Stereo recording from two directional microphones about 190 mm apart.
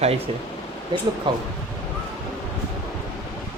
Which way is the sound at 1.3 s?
25° right (ahead or behind).